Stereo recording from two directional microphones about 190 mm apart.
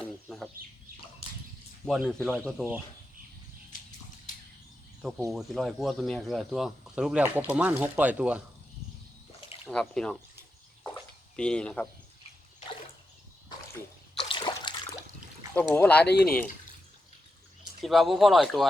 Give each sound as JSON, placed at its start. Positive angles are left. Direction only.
{"t": 1.9, "sound": "speech", "side_deg": 0}
{"t": 5.3, "sound": "speech", "side_deg": 0}
{"t": 9.6, "sound": "speech", "side_deg": 5}
{"t": 11.3, "sound": "speech", "side_deg": 5}
{"t": 14.3, "sound": "splash", "side_deg": 25}
{"t": 15.7, "sound": "speech", "side_deg": 10}
{"t": 16.0, "sound": "speech", "side_deg": 50}
{"t": 17.8, "sound": "speech", "side_deg": 0}